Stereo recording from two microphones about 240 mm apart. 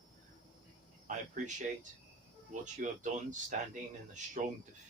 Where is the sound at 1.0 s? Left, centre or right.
Right.